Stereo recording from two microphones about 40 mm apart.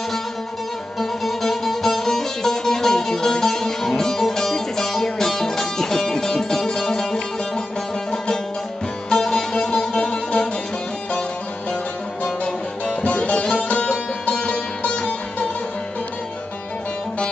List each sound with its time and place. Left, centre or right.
0.9 s music: centre
9.1 s music: centre
12.3 s music: centre
13.0 s music: left
15.0 s music: left